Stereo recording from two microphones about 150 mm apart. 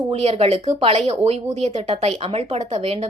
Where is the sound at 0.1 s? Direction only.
40° right (ahead or behind).